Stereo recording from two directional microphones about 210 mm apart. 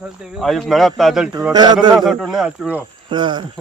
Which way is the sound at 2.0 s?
Centre (ahead or behind).